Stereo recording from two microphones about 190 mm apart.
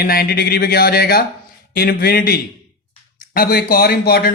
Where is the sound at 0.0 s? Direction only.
55° left (ahead or behind).